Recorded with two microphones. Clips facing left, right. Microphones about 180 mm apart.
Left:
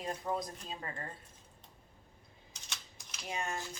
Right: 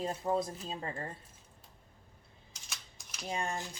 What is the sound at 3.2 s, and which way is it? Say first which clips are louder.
Dishes: right 3 dB; 35° right (ahead or behind).